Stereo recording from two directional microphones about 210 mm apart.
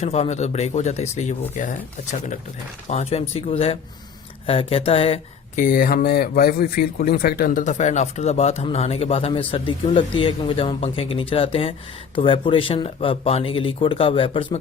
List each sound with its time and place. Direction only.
0.0 s speech: 30° left (ahead or behind)